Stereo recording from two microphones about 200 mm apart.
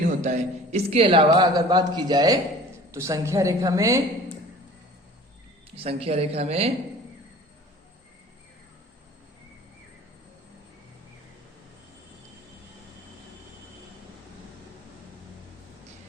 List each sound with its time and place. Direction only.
0.0 s a man's voice: 35° right (ahead or behind); by 4.0 s 15° right (ahead or behind)
5.7 s a man's voice: 30° right (ahead or behind)